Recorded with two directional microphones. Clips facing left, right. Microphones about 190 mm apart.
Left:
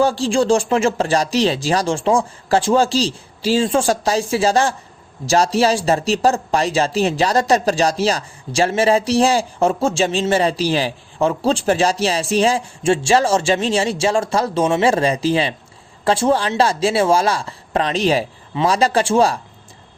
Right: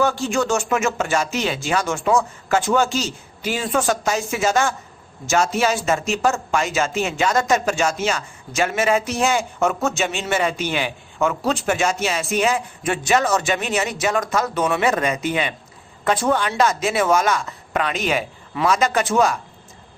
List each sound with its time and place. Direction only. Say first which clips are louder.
0.0 s speech: left 4 dB; 30° left (ahead or behind)